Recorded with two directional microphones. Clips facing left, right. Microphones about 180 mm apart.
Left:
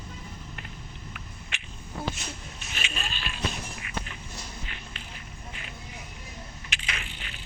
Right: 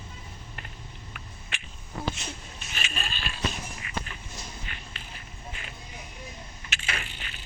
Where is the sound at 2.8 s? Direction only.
45° right (ahead or behind).